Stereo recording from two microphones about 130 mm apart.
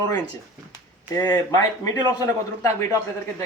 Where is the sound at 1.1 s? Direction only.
25° left (ahead or behind).